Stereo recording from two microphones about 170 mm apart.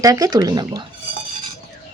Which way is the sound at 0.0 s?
20° right (ahead or behind).